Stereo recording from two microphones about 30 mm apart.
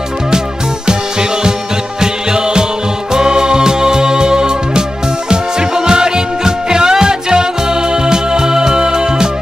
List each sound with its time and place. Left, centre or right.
2.0 s music: right